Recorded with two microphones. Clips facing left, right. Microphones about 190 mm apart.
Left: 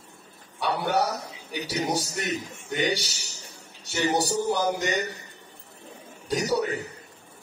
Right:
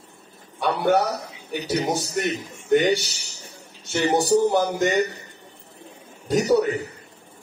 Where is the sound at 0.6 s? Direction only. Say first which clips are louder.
Right 5 dB; 50° right (ahead or behind).